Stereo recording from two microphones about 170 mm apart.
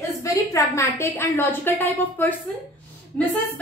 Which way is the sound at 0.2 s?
20° left (ahead or behind).